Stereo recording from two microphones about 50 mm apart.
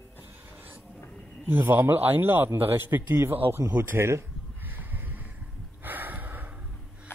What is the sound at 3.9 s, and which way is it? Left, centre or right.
Speech, right.